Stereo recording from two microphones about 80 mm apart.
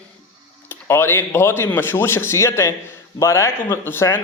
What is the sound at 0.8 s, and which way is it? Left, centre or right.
A man's voice, left.